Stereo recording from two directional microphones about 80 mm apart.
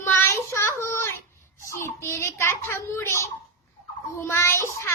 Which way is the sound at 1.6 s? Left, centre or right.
Left.